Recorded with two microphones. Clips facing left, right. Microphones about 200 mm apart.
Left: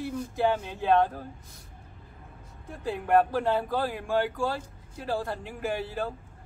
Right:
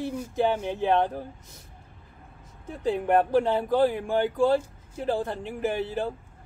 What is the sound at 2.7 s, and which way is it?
Speech, 20° right (ahead or behind).